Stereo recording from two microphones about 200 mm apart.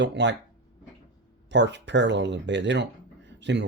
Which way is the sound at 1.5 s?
60° right (ahead or behind).